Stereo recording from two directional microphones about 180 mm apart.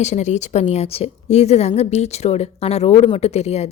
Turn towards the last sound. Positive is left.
turn(degrees=35)  # may be behind; listen again after turning